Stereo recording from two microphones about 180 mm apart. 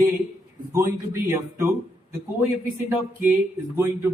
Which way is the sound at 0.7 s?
15° right (ahead or behind).